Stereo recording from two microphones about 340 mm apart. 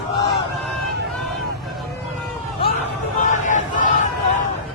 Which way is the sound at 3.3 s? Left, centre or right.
Left.